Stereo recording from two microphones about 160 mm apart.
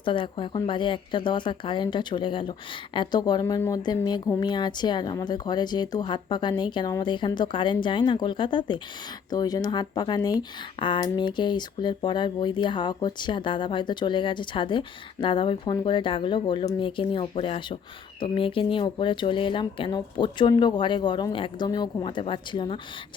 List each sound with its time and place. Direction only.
0.0 s speech: 30° left (ahead or behind)